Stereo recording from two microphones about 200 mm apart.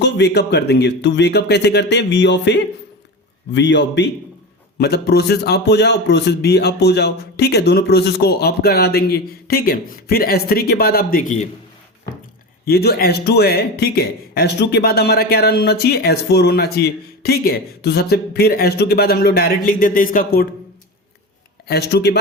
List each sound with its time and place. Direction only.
0.0 s speech: 55° left (ahead or behind)
12.6 s speech: 50° left (ahead or behind)
21.7 s speech: 55° left (ahead or behind)